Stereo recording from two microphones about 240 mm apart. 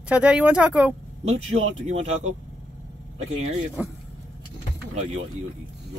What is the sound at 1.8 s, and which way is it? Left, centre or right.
Speech, right.